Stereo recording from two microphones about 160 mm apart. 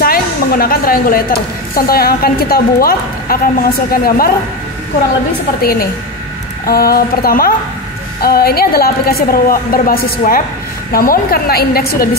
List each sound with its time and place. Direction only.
0.0 s a woman's voice: 70° left (ahead or behind)
5.6 s a woman's voice: 70° left (ahead or behind)